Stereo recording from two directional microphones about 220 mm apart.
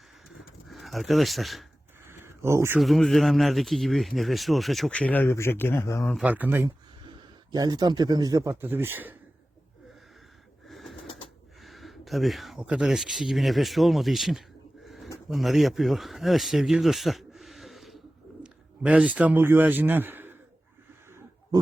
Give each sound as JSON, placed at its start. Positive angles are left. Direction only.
{"t": 0.3, "sound": "a sound", "side_deg": 0}
{"t": 2.0, "sound": "a sound", "side_deg": -10}
{"t": 2.8, "sound": "speech", "side_deg": 0}
{"t": 6.1, "sound": "speech", "side_deg": -5}
{"t": 10.7, "sound": "bird", "side_deg": 0}
{"t": 11.6, "sound": "speech", "side_deg": 0}
{"t": 14.8, "sound": "pigeon", "side_deg": 0}
{"t": 15.3, "sound": "a man's voice", "side_deg": 0}